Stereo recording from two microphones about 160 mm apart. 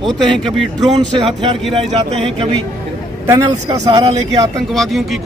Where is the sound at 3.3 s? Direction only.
20° right (ahead or behind).